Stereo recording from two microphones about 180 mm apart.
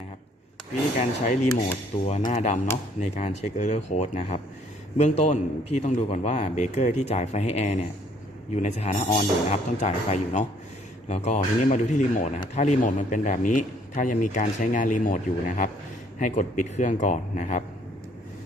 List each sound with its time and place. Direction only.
0.9 s a man's voice: 40° left (ahead or behind)